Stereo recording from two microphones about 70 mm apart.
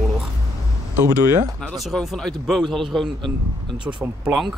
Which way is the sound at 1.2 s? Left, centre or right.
Right.